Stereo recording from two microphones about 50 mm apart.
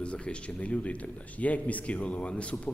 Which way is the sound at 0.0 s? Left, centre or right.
Left.